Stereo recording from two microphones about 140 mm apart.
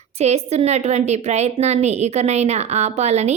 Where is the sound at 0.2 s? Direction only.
50° right (ahead or behind).